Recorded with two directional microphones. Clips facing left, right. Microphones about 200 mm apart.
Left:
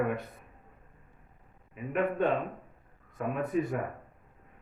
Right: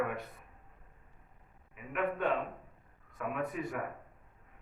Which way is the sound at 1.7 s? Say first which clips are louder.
Left 5 dB; 30° left (ahead or behind).